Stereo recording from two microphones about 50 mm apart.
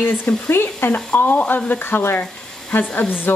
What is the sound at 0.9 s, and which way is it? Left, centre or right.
Speech, left.